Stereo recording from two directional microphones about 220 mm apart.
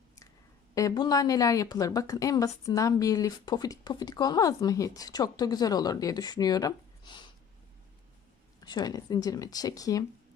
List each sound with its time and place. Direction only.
0.7 s a woman's voice: 15° left (ahead or behind)
8.6 s a woman's voice: 20° left (ahead or behind)